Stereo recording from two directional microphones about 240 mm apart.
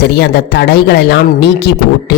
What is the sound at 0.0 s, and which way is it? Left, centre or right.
Speech, left.